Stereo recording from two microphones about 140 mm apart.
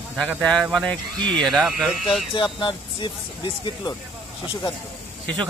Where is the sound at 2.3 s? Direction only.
35° left (ahead or behind).